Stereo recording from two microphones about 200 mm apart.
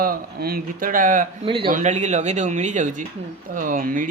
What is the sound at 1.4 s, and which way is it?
Speech, 25° right (ahead or behind).